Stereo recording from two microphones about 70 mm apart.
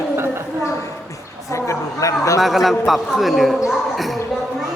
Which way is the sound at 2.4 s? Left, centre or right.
Centre.